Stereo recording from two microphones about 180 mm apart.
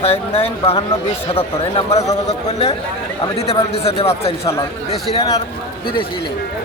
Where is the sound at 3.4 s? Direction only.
35° left (ahead or behind).